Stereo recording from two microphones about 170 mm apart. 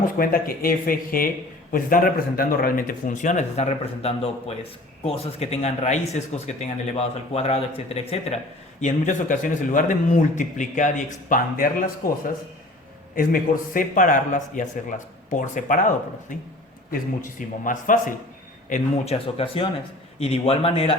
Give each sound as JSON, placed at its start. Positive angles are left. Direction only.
{"t": 0.0, "sound": "a man's voice", "side_deg": 55}
{"t": 8.8, "sound": "a man's voice", "side_deg": 50}
{"t": 13.1, "sound": "a man's voice", "side_deg": 55}
{"t": 18.7, "sound": "speech", "side_deg": 35}